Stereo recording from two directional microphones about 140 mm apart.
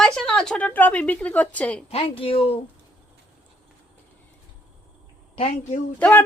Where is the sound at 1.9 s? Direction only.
45° left (ahead or behind).